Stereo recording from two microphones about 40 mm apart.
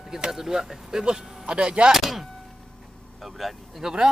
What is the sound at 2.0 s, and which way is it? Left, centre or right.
Speech, centre.